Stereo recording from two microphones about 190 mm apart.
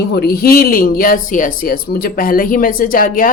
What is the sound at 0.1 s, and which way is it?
Speech, 55° left (ahead or behind).